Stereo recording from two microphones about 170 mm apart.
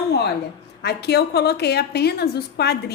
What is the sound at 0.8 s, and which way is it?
A woman's voice, 75° left (ahead or behind).